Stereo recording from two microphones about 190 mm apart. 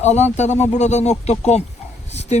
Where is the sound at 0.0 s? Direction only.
35° left (ahead or behind).